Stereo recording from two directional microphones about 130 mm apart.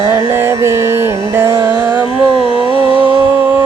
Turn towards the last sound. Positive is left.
turn(degrees=-45)  # may be behind; listen again after turning